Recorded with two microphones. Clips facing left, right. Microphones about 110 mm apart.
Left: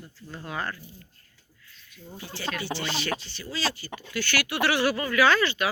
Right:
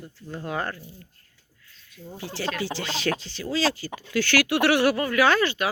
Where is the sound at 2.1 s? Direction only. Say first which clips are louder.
Right 6 dB; 85° right.